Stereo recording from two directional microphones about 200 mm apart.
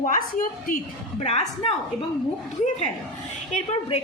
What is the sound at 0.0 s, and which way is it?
A woman's voice, 40° left (ahead or behind).